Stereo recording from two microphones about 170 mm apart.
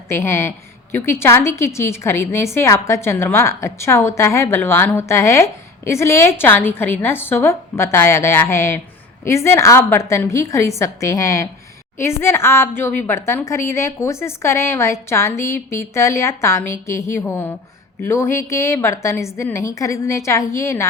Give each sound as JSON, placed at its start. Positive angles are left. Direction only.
{"t": 0.1, "sound": "a woman's voice", "side_deg": 15}